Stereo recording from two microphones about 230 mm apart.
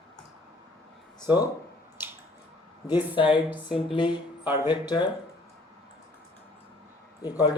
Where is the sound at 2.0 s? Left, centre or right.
Centre.